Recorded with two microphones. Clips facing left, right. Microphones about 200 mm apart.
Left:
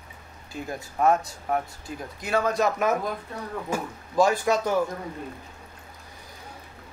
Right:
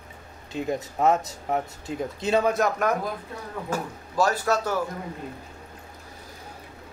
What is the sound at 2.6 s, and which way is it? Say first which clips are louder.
Speech: even; 5° left (ahead or behind).